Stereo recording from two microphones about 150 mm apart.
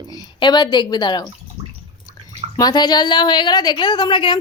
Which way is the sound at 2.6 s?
30° left (ahead or behind).